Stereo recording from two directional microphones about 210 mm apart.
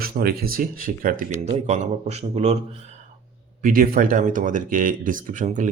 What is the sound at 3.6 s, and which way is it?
Speech, 40° right (ahead or behind).